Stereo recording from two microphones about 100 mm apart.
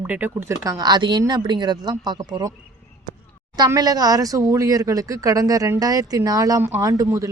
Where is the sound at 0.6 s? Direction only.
40° right (ahead or behind).